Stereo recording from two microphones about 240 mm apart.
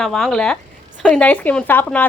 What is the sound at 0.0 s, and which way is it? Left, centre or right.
Speech, centre.